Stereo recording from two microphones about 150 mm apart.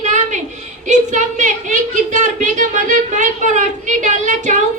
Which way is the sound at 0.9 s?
55° right (ahead or behind).